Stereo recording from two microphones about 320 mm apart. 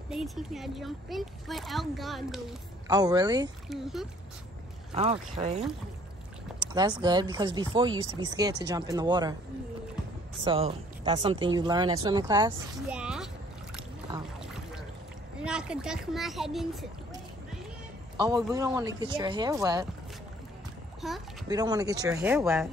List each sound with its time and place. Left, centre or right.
0.1 s a child's voice: centre
2.9 s speech: centre
3.6 s a child's voice: centre
4.9 s speech: centre
6.6 s speech: centre
10.4 s speech: centre
13.0 s splash: centre
15.4 s a child's voice: centre
18.1 s a sound: centre
18.4 s speech: centre
21.0 s a child's voice: centre
21.5 s speech: centre